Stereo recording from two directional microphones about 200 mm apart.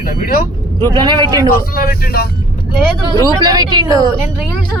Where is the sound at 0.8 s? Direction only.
20° right (ahead or behind).